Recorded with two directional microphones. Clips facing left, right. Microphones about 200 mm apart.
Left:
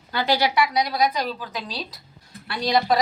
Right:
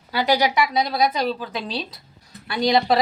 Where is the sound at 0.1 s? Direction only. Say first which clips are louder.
Right 2 dB; 15° right (ahead or behind).